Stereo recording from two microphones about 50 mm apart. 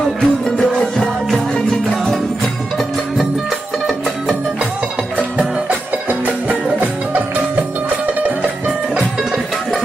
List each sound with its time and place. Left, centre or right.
0.2 s music: centre
5.6 s music: right
9.0 s music: centre